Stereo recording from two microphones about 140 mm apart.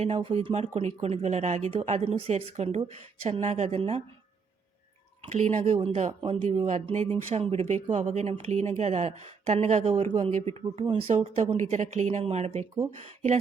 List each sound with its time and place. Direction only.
0.0 s speech: 40° right (ahead or behind)
5.2 s speech: 50° right (ahead or behind)
10.3 s speech: 50° right (ahead or behind)